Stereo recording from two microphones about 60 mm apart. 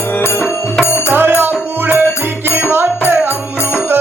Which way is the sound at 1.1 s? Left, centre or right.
Right.